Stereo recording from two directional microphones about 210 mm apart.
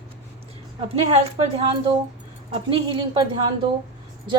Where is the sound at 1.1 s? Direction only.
30° right (ahead or behind).